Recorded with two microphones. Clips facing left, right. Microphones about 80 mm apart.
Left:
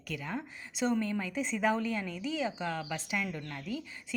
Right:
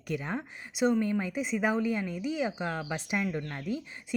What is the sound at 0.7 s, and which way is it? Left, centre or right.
Speech, centre.